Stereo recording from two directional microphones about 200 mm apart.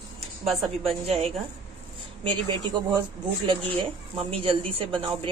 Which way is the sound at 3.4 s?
25° right (ahead or behind).